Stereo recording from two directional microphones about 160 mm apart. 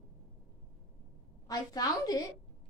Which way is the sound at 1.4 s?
25° left (ahead or behind).